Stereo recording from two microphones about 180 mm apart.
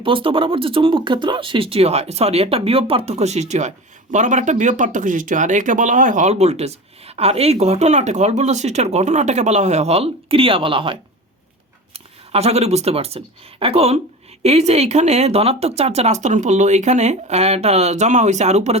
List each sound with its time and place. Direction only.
0.0 s speech: 30° right (ahead or behind)
11.9 s speech: 35° right (ahead or behind)